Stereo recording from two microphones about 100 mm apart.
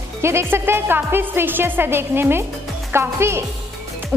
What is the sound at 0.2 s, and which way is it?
A woman's voice, 25° right (ahead or behind).